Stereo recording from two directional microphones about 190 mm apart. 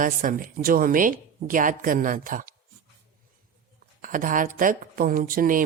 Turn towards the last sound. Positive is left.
turn(degrees=-45)  # may be behind; listen again after turning